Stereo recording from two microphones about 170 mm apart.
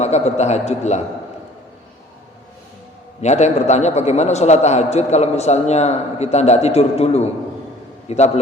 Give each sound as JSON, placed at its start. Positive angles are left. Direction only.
{"t": 0.0, "sound": "a man's voice", "side_deg": 40}
{"t": 3.2, "sound": "a man's voice", "side_deg": 40}